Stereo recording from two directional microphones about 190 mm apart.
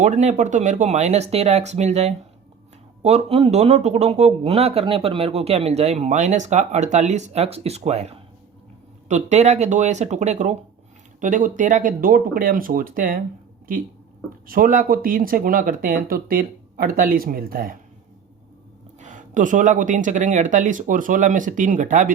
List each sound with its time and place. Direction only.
0.0 s speech: 40° right (ahead or behind)
14.4 s speech: 50° right (ahead or behind)
18.9 s speech: 40° right (ahead or behind)